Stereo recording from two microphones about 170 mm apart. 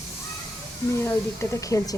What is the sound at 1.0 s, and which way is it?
Speech, 15° left (ahead or behind).